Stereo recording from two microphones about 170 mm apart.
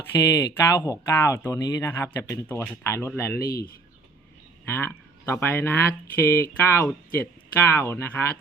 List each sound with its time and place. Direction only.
0.0 s speech: 20° left (ahead or behind)
4.6 s speech: 10° left (ahead or behind)